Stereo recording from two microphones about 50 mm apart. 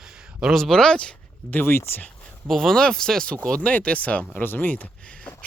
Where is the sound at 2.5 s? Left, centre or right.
Centre; by 4.3 s left.